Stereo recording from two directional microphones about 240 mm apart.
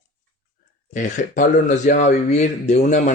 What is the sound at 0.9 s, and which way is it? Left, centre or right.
Speech, left.